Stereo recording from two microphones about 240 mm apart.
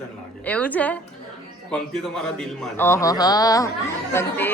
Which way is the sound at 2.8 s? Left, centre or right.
Centre.